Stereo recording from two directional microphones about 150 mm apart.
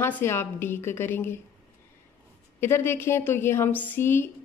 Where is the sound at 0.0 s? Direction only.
15° left (ahead or behind).